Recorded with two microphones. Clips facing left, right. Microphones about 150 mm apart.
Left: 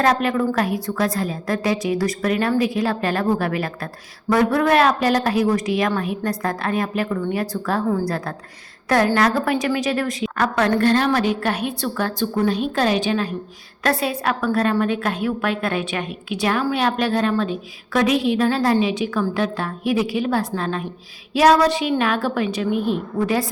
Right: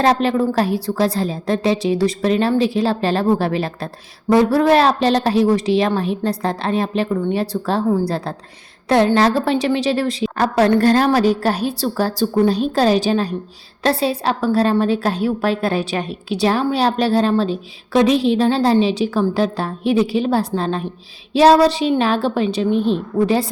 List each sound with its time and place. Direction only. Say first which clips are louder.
0.0 s a woman's voice: right 3 dB; 30° right (ahead or behind)